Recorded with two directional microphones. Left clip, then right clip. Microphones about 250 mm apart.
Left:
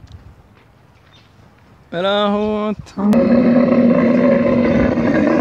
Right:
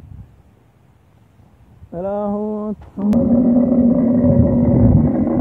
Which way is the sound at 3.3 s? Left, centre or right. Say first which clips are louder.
Left 1 dB; left.